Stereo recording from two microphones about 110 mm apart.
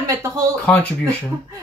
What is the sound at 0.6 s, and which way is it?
Speech, 10° left (ahead or behind).